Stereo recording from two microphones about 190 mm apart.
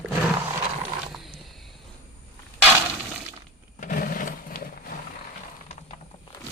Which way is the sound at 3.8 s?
45° left (ahead or behind).